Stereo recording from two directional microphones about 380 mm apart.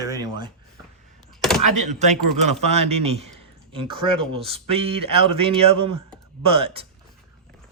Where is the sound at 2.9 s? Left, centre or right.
Centre.